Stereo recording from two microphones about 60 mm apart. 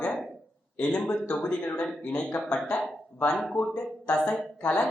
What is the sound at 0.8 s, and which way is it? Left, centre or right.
A man's voice, centre.